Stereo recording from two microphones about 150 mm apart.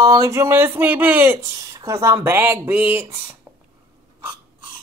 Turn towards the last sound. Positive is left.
turn(degrees=-10)  # may be behind; listen again after turning